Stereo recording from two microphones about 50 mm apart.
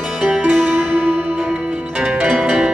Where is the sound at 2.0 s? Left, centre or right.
Centre.